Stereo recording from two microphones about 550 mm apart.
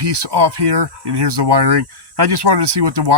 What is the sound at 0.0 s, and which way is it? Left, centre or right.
Speech, right.